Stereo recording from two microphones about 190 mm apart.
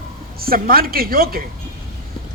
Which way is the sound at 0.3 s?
50° right (ahead or behind).